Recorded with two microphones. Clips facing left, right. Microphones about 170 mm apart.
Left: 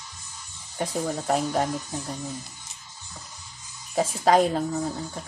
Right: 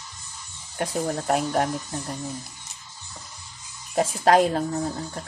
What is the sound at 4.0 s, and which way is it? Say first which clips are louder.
Speech: right 1 dB; centre (ahead or behind).